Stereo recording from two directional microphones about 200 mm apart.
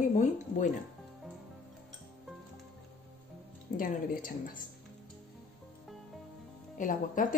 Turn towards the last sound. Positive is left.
turn(degrees=40)  # may be behind; listen again after turning